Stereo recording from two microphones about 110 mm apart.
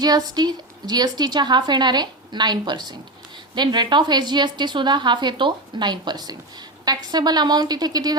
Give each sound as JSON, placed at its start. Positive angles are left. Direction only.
{"t": 0.0, "sound": "a woman's voice", "side_deg": -40}